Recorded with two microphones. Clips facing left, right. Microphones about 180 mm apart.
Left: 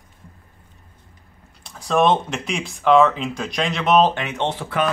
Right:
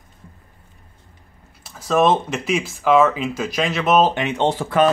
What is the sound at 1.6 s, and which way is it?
Speech, 5° right (ahead or behind).